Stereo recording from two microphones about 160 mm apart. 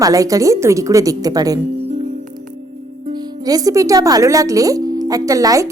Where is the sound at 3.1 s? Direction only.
25° right (ahead or behind).